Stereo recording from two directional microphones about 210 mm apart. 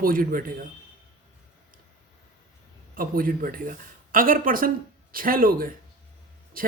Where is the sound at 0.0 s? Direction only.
45° right (ahead or behind).